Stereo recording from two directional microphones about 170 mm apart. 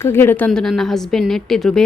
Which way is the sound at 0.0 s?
15° left (ahead or behind).